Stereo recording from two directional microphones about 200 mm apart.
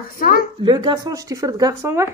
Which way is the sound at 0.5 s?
25° right (ahead or behind).